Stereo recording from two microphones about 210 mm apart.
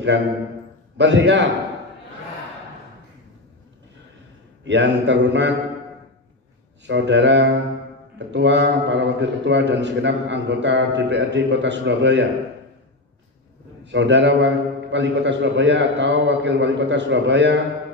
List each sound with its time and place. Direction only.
0.9 s a man's voice: 55° right (ahead or behind)
4.6 s a man's voice: 55° right (ahead or behind)
6.9 s a man's voice: 60° right (ahead or behind)
13.9 s a man's voice: 60° right (ahead or behind)